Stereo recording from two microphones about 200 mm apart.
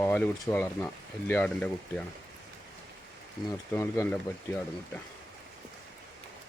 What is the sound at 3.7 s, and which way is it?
Speech, 10° left (ahead or behind).